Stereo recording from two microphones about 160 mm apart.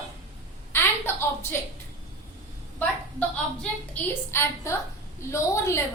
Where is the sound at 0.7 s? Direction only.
15° left (ahead or behind).